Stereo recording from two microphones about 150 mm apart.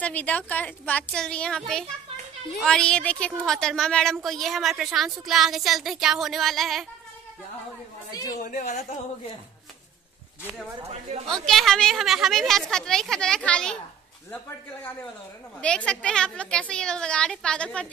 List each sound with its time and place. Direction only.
0.0 s a woman's voice: 10° left (ahead or behind)
8.1 s speech: 25° left (ahead or behind)
8.4 s speech: 60° left (ahead or behind)
11.2 s a woman's voice: centre (ahead or behind)
15.6 s a woman's voice: 5° left (ahead or behind)